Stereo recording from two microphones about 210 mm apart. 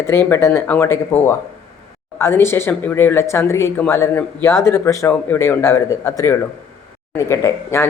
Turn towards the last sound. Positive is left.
turn(degrees=15)  # may be behind; listen again after turning